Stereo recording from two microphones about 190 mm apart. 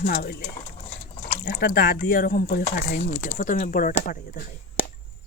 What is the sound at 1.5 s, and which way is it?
Speech, 60° left (ahead or behind).